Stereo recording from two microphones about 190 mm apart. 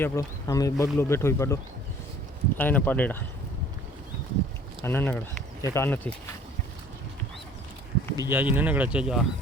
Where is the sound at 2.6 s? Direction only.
10° left (ahead or behind).